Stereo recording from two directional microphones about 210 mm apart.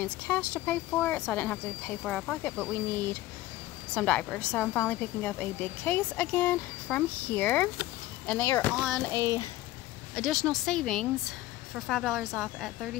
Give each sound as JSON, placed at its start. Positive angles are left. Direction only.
{"t": 0.0, "sound": "a woman's voice", "side_deg": 10}
{"t": 10.1, "sound": "speech", "side_deg": 0}